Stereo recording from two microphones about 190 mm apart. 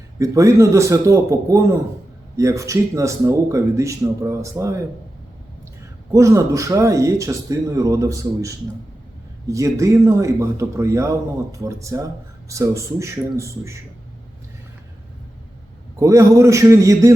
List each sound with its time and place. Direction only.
0.2 s speech: 15° right (ahead or behind)
6.1 s speech: 15° right (ahead or behind)
16.0 s speech: 15° right (ahead or behind)